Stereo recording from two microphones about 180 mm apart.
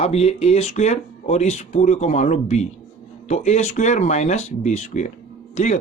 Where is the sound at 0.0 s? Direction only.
35° left (ahead or behind).